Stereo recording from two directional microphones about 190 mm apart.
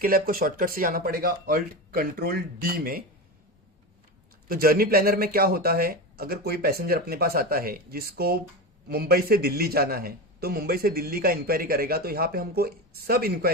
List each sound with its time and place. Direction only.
0.0 s a man's voice: 50° right (ahead or behind)
4.4 s a man's voice: 50° right (ahead or behind)